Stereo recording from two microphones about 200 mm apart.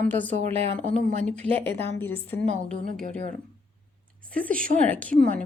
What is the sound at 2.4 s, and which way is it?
Speech, 35° right (ahead or behind).